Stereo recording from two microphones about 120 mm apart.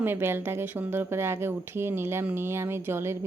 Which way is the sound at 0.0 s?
20° right (ahead or behind).